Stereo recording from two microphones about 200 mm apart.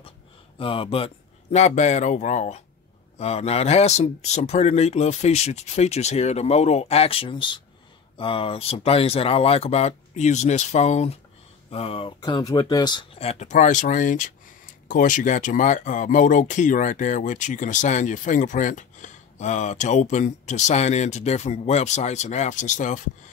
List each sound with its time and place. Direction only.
0.6 s speech: 25° left (ahead or behind)